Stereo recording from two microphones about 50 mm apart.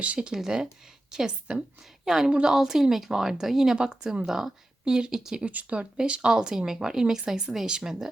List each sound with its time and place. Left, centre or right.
0.0 s speech: right
0.3 s a woman's voice: centre
5.5 s speech: right; by 8.0 s centre